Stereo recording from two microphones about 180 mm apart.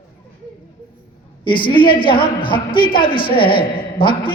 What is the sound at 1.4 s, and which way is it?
A man's voice, 25° left (ahead or behind).